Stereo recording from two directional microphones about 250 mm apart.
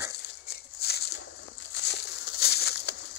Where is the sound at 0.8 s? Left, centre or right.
Left.